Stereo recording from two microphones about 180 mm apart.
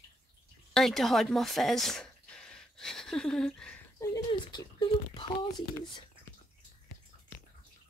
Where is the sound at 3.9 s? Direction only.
20° left (ahead or behind).